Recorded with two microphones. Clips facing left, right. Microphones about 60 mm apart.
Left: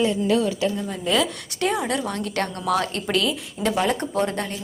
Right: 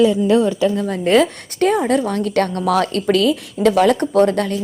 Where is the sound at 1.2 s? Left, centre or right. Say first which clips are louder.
Right 8 dB; right.